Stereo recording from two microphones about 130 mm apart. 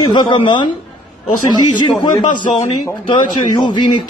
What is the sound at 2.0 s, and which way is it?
A man's voice, 35° left (ahead or behind).